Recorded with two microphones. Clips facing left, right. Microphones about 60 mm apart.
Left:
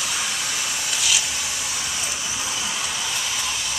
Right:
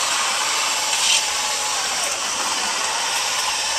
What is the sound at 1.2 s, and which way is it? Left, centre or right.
Vehicle, right.